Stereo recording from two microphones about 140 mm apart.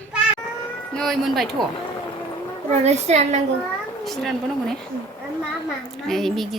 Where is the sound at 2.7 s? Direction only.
55° right (ahead or behind).